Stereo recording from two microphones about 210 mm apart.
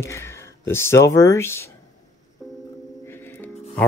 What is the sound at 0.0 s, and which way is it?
Speech, 10° left (ahead or behind).